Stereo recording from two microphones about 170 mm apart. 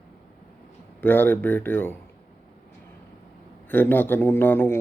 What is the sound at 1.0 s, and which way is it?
Speech, 10° left (ahead or behind).